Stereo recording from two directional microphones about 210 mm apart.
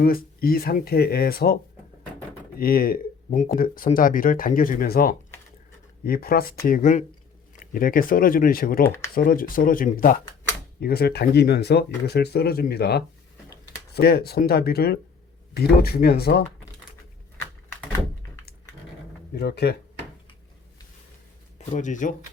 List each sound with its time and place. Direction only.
0.0 s speech: 45° left (ahead or behind)
2.6 s speech: 45° left (ahead or behind)
19.3 s speech: 50° left (ahead or behind)
21.6 s speech: 35° left (ahead or behind)